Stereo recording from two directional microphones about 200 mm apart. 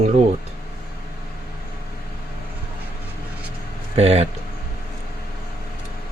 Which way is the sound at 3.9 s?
30° right (ahead or behind).